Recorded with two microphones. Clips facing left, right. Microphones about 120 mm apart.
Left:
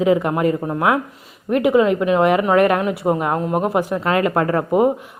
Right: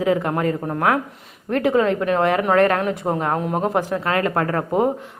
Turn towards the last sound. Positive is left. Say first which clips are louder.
# left 3 dB
turn(degrees=15)  # may be behind; listen again after turning